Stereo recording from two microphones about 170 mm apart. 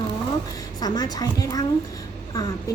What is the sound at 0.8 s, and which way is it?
Speech, 20° left (ahead or behind).